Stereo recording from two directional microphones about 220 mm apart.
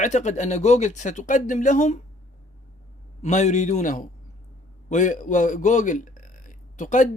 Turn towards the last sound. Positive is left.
turn(degrees=35)  # may be behind; listen again after turning